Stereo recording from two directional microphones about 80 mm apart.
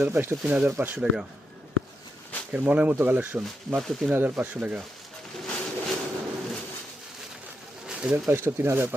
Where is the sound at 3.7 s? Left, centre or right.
Centre.